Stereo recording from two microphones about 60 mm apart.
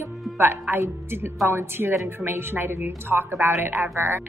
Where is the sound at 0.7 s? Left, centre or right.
Right.